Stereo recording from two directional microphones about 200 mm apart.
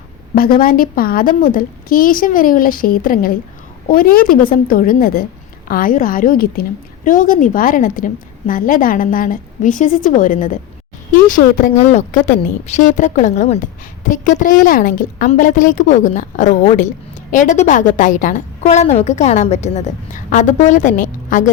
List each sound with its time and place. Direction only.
0.3 s a woman's voice: 45° left (ahead or behind)